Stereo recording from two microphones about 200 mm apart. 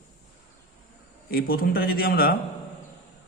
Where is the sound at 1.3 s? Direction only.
50° left (ahead or behind).